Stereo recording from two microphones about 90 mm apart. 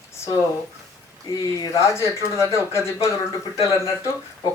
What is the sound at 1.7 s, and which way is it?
Speech, 30° left (ahead or behind).